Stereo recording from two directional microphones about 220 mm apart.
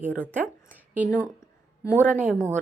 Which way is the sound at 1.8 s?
10° left (ahead or behind).